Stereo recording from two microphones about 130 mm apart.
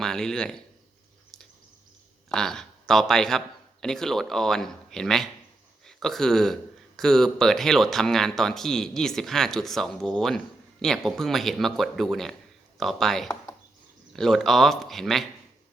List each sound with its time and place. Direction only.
0.0 s speech: 5° left (ahead or behind)
2.3 s speech: 5° left (ahead or behind)